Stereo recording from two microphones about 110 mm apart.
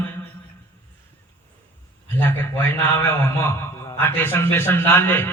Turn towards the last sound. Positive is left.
turn(degrees=20)  # may be behind; listen again after turning